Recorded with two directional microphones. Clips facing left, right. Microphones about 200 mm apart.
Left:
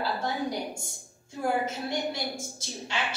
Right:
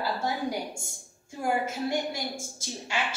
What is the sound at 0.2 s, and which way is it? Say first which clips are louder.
A woman's voice: even; 10° right (ahead or behind).